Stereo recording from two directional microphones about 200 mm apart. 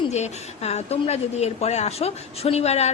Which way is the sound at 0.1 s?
35° left (ahead or behind).